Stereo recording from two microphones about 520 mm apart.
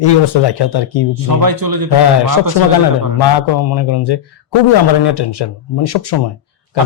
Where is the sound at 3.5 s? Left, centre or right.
Left.